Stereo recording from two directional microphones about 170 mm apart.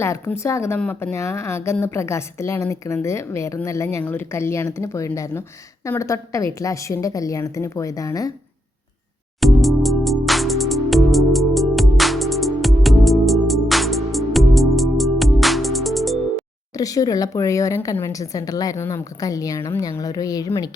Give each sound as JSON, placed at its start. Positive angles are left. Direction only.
{"t": 0.0, "sound": "speech", "side_deg": 15}
{"t": 9.4, "sound": "music", "side_deg": 0}
{"t": 16.7, "sound": "speech", "side_deg": 20}